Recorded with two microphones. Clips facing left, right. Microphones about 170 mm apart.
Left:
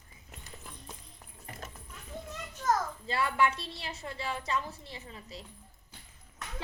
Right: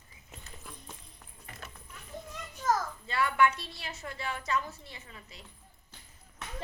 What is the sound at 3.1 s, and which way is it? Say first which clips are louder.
A woman's voice: right 2 dB; 30° left (ahead or behind).